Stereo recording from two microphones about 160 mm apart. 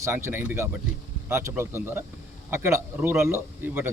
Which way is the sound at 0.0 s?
15° right (ahead or behind).